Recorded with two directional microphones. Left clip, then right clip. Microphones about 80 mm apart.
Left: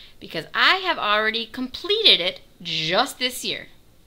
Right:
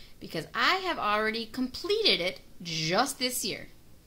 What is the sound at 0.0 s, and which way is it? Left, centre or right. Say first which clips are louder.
A woman's voice: left 6 dB; left.